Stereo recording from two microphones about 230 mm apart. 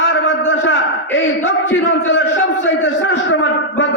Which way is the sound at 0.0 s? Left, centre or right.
Left.